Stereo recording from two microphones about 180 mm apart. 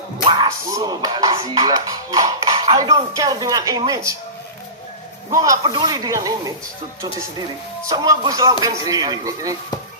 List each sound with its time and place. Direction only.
0.3 s speech: 20° right (ahead or behind)
5.3 s speech: 20° right (ahead or behind)